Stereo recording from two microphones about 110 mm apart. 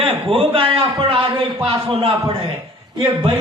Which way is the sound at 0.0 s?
55° right (ahead or behind).